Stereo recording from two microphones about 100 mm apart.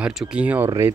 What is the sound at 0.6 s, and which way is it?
Speech, 25° right (ahead or behind).